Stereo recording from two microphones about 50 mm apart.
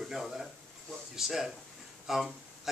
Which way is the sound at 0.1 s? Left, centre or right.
Centre.